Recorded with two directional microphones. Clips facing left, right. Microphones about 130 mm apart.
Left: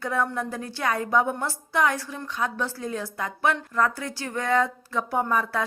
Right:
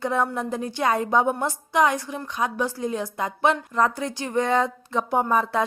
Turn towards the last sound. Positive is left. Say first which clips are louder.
# right 3 dB
turn(degrees=-25)  # may be behind; listen again after turning